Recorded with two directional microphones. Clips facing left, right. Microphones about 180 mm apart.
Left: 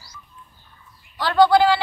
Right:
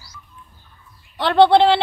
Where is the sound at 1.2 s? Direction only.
25° right (ahead or behind).